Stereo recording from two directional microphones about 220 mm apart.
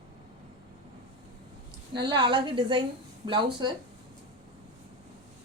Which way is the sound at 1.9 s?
20° right (ahead or behind).